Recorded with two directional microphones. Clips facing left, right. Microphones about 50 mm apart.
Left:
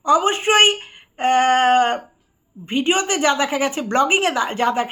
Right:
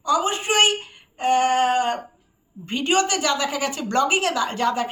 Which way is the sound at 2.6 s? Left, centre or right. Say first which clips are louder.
Left 2 dB; left.